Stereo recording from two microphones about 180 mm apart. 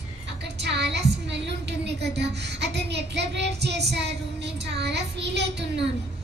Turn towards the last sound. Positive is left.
turn(degrees=-70)  # may be behind; listen again after turning